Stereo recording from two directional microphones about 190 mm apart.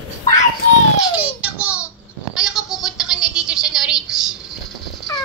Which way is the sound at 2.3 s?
5° right (ahead or behind).